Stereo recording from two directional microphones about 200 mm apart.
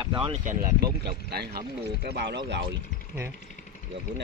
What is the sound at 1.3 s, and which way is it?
Speech, 50° right (ahead or behind).